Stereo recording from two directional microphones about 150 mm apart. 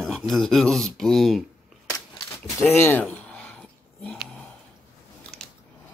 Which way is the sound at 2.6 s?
15° left (ahead or behind).